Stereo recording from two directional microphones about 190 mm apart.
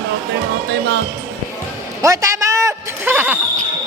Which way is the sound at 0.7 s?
65° right (ahead or behind).